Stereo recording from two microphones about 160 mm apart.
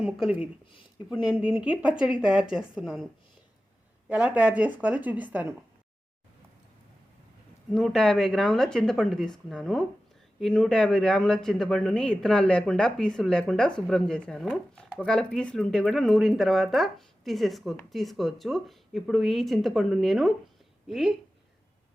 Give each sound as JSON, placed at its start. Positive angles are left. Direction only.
{"t": 0.0, "sound": "speech", "side_deg": -5}
{"t": 0.7, "sound": "speech", "side_deg": 30}
{"t": 1.2, "sound": "speech", "side_deg": -5}
{"t": 4.1, "sound": "speech", "side_deg": -10}
{"t": 7.7, "sound": "speech", "side_deg": 0}